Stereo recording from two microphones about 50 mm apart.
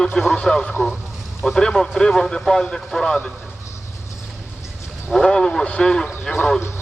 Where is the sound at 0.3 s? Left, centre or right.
Centre.